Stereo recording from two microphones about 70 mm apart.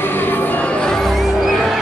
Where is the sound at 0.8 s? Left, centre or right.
Centre.